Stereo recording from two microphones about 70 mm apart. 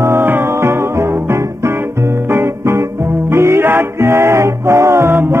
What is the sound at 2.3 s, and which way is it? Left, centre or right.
Music, right.